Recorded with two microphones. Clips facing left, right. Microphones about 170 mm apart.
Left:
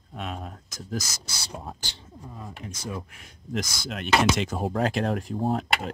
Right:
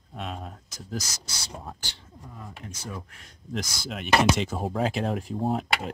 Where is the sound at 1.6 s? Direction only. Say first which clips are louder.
Left 2 dB; 25° left (ahead or behind).